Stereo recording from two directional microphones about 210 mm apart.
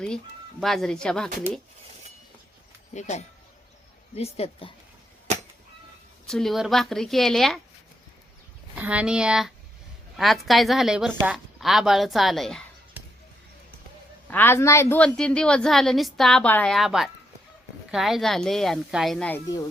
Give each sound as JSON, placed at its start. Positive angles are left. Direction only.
{"t": 0.6, "sound": "a woman's voice", "side_deg": 0}
{"t": 2.9, "sound": "speech", "side_deg": 35}
{"t": 6.2, "sound": "a woman's voice", "side_deg": 0}
{"t": 8.7, "sound": "a woman's voice", "side_deg": -5}
{"t": 14.3, "sound": "a woman's voice", "side_deg": 10}